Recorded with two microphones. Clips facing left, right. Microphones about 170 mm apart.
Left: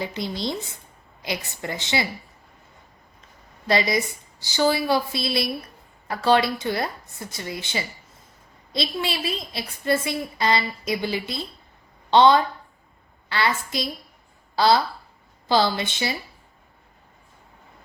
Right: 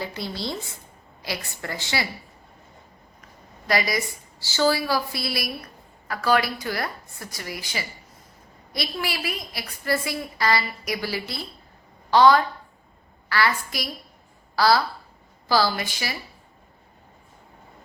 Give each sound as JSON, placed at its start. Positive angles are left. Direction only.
{"t": 0.0, "sound": "a woman's voice", "side_deg": 20}
{"t": 3.7, "sound": "a woman's voice", "side_deg": 25}